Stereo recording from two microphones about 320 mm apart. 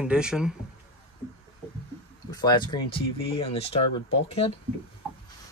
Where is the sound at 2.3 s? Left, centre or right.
Centre.